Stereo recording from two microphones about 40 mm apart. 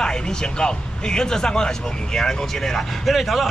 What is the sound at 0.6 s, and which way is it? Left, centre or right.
Speech, left.